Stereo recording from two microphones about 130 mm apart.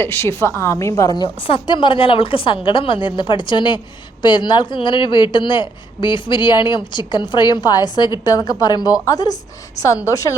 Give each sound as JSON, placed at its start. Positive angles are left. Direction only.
{"t": 0.0, "sound": "a woman's voice", "side_deg": 15}
{"t": 1.2, "sound": "a woman's voice", "side_deg": 40}